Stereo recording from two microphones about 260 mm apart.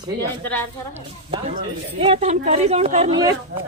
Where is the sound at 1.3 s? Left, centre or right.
Right.